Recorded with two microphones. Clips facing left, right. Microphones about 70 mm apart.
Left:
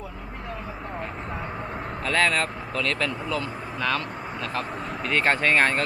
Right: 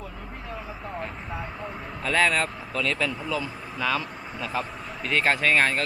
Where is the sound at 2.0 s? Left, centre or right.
Centre.